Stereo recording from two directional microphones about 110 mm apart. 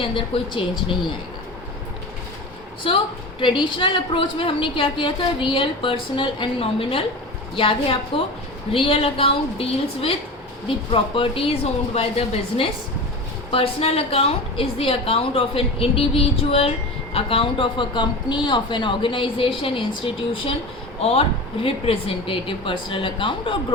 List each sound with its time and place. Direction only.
0.3 s a woman's voice: 55° left (ahead or behind)
2.8 s a woman's voice: 55° left (ahead or behind)
21.0 s a woman's voice: 65° left (ahead or behind)